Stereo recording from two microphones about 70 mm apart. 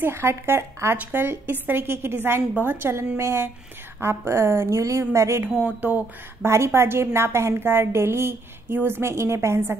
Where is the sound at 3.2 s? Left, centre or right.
Right.